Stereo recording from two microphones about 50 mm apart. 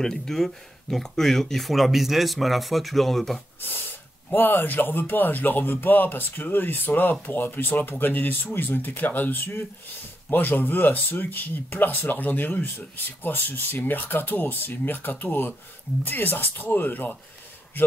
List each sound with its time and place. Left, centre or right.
0.0 s speech: centre
4.3 s speech: left